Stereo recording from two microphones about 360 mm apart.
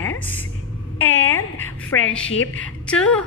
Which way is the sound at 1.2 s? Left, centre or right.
Centre.